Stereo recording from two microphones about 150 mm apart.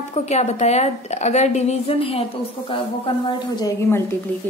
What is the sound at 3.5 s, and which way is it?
Speech, 20° left (ahead or behind).